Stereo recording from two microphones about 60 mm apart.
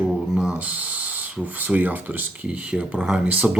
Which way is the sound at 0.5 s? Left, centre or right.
Right.